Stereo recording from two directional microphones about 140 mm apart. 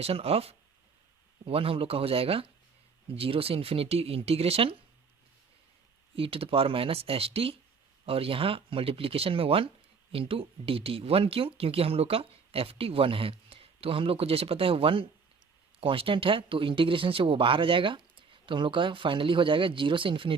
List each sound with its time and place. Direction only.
0.0 s speech: 45° right (ahead or behind)
6.1 s speech: 40° right (ahead or behind)